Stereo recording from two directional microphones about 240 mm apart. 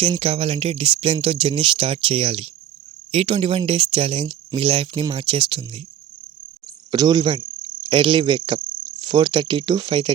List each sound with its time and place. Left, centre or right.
0.0 s speech: right
6.9 s cricket: centre